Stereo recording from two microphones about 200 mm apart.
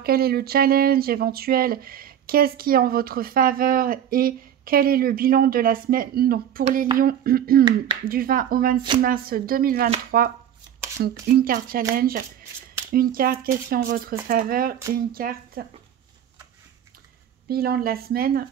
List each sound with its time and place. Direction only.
0.0 s speech: 50° right (ahead or behind)
17.5 s speech: 50° right (ahead or behind)